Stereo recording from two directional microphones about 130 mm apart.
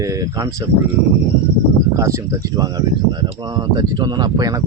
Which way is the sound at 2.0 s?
25° right (ahead or behind).